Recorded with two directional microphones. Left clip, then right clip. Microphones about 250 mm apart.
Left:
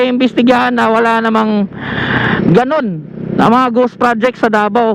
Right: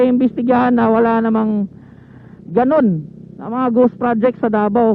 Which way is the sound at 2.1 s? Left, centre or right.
Centre.